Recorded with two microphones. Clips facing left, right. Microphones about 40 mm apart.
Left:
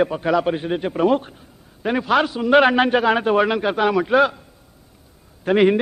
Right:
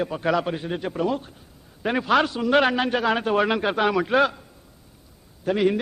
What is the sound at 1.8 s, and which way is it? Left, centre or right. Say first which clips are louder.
A man's voice: left 2 dB; centre.